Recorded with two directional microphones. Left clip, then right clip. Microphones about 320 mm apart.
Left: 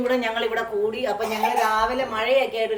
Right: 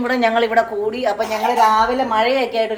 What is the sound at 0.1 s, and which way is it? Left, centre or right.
Speech, centre.